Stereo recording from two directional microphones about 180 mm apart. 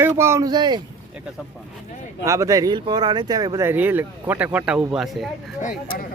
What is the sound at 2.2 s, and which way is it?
Speech, 15° right (ahead or behind).